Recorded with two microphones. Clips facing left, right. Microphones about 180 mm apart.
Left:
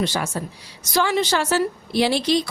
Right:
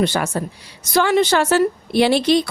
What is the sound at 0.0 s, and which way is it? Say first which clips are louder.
A woman's voice: right 5 dB; 60° right (ahead or behind).